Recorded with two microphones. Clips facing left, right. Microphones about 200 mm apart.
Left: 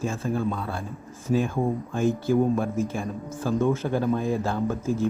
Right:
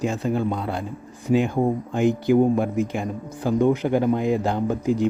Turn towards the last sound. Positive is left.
turn(degrees=-15)  # may be behind; listen again after turning